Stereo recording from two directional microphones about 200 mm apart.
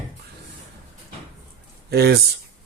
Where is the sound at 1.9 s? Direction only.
55° right (ahead or behind).